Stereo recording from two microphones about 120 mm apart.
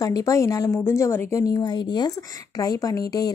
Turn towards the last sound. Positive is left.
turn(degrees=30)  # may be behind; listen again after turning